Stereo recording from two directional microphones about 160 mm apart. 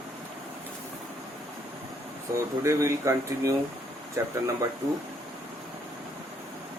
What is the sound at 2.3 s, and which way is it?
Speech, 20° right (ahead or behind).